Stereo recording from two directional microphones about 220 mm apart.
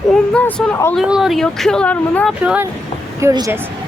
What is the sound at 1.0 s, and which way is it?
Speech, 5° right (ahead or behind).